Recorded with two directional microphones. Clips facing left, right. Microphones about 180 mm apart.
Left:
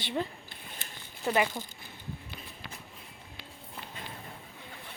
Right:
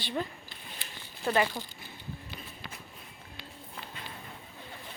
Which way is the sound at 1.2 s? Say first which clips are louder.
Even; 15° left (ahead or behind).